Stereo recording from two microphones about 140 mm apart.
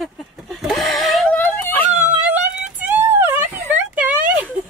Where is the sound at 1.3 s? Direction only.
15° left (ahead or behind).